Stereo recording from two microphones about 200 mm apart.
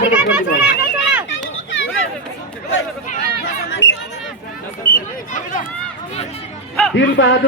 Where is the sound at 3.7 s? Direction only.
60° left (ahead or behind).